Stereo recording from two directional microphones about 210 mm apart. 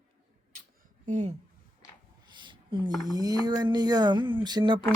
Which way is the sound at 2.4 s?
25° right (ahead or behind).